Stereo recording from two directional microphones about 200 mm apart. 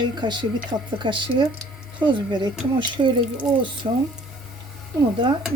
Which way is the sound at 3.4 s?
25° right (ahead or behind).